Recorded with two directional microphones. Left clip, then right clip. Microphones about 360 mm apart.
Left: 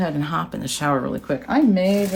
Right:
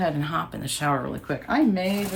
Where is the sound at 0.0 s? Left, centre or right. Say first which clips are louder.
Left 2 dB; centre.